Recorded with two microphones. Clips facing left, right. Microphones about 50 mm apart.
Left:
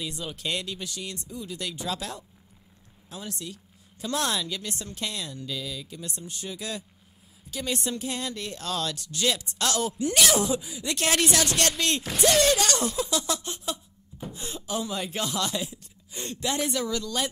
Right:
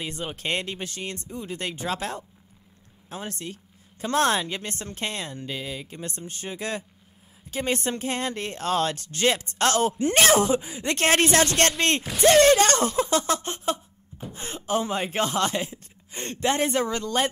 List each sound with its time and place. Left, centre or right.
0.0 s speech: right